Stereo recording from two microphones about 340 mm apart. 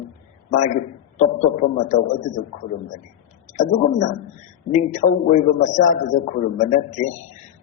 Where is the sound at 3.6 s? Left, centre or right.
Left.